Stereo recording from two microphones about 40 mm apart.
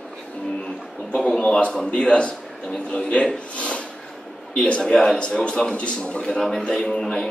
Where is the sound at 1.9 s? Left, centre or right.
Left.